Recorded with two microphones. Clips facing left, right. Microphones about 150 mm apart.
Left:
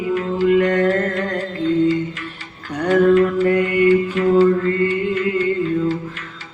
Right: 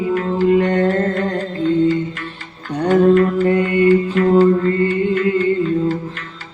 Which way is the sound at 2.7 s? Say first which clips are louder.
Right 2 dB; 30° right (ahead or behind).